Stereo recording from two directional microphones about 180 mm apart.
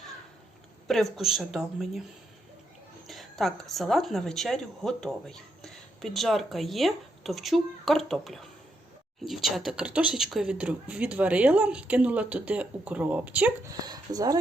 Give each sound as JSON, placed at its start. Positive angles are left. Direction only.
{"t": 0.9, "sound": "speech", "side_deg": 0}
{"t": 3.1, "sound": "speech", "side_deg": 0}
{"t": 13.7, "sound": "speech", "side_deg": -20}